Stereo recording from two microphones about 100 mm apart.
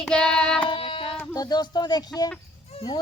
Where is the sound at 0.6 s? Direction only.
65° left (ahead or behind).